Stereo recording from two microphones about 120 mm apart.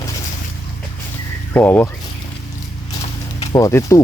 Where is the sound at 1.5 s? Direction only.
15° left (ahead or behind).